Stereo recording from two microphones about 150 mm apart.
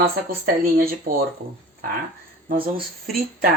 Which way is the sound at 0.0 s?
90° right.